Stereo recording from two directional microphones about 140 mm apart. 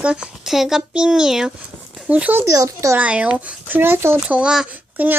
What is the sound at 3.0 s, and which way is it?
A child's voice, 10° right (ahead or behind).